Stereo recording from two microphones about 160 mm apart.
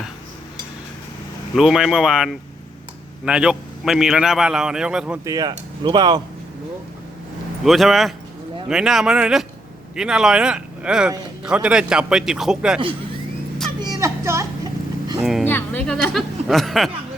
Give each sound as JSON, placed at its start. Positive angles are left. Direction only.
{"t": 1.5, "sound": "a man's voice", "side_deg": -5}
{"t": 5.2, "sound": "speech", "side_deg": -25}
{"t": 7.6, "sound": "a man's voice", "side_deg": 0}
{"t": 13.7, "sound": "a sound", "side_deg": -25}
{"t": 15.2, "sound": "speech", "side_deg": 0}
{"t": 15.4, "sound": "speech", "side_deg": 10}